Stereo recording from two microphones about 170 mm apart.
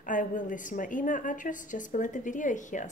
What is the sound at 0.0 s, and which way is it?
A woman's voice, 50° left (ahead or behind).